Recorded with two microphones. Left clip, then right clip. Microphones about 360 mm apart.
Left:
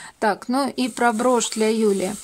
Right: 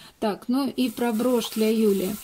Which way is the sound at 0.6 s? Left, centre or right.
Centre.